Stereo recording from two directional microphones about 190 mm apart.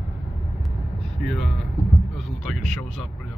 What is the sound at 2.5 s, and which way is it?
Speech, centre (ahead or behind).